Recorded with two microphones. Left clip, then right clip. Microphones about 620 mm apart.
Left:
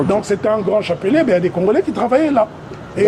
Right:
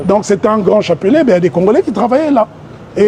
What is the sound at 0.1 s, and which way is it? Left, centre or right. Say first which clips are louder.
Speech: right 9 dB; right.